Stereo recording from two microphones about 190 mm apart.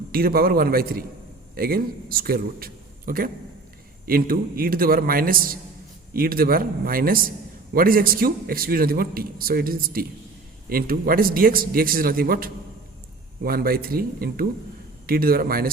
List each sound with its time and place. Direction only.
0.1 s a man's voice: 50° right (ahead or behind)